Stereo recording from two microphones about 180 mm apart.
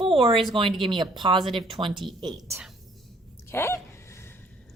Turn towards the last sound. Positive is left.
turn(degrees=15)  # may be behind; listen again after turning